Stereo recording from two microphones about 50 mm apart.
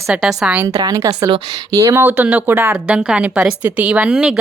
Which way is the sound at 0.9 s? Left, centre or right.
Right.